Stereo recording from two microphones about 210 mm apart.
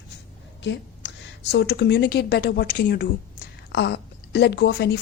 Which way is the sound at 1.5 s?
55° left (ahead or behind).